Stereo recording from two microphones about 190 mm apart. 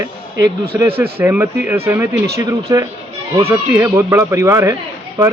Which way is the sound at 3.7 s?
10° right (ahead or behind).